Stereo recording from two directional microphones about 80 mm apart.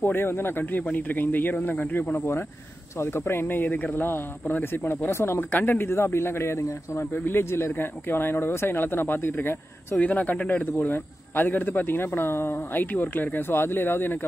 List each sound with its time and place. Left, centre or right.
0.0 s speech: left